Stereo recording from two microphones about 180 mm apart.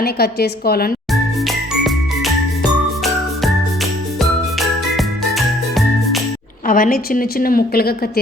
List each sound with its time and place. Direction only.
0.0 s a woman's voice: 60° left (ahead or behind)
1.1 s jingle: centre (ahead or behind)
4.2 s music: centre (ahead or behind)
6.7 s a woman's voice: 50° left (ahead or behind)